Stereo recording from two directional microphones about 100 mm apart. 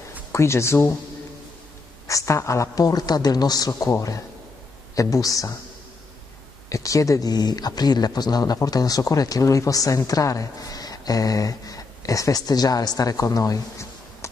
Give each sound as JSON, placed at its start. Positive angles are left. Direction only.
{"t": 0.3, "sound": "speech", "side_deg": 30}
{"t": 2.0, "sound": "speech", "side_deg": 30}
{"t": 6.7, "sound": "speech", "side_deg": 35}